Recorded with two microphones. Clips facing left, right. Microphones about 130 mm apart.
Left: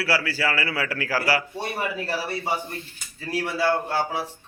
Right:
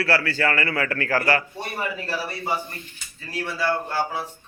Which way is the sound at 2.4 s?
35° left (ahead or behind).